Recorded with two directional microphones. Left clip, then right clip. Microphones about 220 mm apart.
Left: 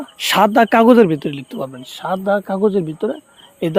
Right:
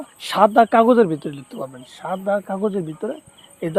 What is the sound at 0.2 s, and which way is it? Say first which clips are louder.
Speech: left 2 dB; 50° left (ahead or behind).